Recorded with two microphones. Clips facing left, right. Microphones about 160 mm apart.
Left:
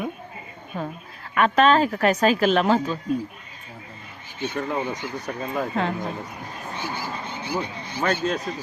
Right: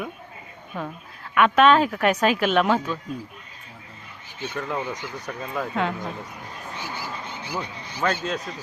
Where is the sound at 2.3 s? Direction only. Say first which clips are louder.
Left 1 dB; 35° left (ahead or behind).